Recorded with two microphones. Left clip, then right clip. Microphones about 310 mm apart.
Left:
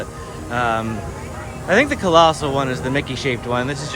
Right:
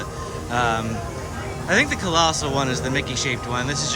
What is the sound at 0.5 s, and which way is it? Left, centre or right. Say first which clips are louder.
A man's voice: left 2 dB; centre.